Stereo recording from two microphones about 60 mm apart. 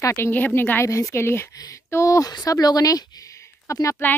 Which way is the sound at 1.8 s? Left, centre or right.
Left.